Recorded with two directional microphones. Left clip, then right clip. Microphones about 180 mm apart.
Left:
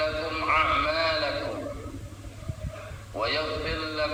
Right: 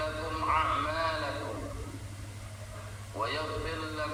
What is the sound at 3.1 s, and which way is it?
Speech, 20° left (ahead or behind).